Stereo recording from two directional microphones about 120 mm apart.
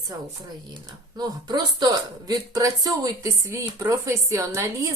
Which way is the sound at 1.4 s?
35° right (ahead or behind).